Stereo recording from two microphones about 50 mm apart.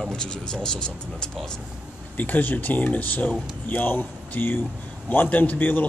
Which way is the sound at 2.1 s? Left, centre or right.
Left.